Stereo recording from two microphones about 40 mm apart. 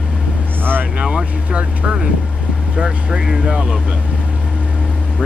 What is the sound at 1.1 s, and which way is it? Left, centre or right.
Vehicle, right.